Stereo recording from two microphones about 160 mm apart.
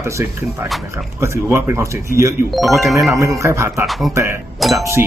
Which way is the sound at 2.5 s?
Centre (ahead or behind).